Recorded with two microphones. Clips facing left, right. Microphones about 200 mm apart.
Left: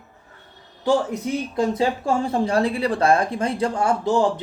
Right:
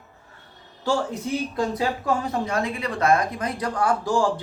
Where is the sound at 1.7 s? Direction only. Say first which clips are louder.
Left 3 dB; 30° left (ahead or behind).